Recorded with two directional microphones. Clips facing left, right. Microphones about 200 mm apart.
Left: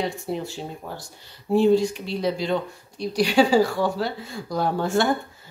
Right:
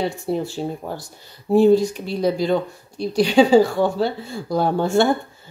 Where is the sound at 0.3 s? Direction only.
30° right (ahead or behind).